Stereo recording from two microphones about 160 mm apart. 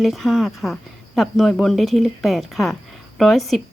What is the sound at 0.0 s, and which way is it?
A woman's voice, centre (ahead or behind).